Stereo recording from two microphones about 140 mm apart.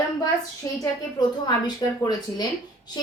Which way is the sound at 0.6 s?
25° left (ahead or behind).